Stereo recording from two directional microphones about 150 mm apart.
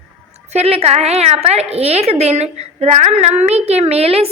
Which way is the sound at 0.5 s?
45° right (ahead or behind).